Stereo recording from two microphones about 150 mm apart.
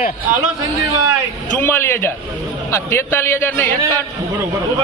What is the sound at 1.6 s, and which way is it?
A man's voice, 15° left (ahead or behind).